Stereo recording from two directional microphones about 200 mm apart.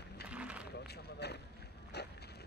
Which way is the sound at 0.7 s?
55° left (ahead or behind).